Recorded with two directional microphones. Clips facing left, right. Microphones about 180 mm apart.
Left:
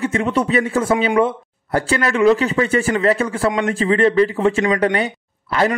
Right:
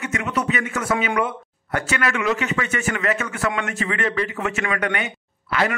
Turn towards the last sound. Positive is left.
turn(degrees=35)  # may be behind; listen again after turning